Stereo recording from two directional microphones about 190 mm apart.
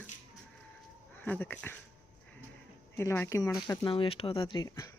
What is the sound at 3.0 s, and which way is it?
Speech, 15° left (ahead or behind).